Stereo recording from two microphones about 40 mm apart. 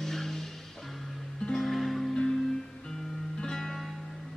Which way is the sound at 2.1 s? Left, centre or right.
Centre.